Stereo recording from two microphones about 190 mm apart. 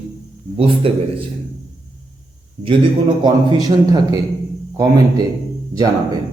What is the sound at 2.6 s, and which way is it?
Speech, 40° right (ahead or behind).